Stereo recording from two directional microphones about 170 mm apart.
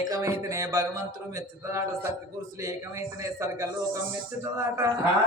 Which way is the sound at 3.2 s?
15° right (ahead or behind).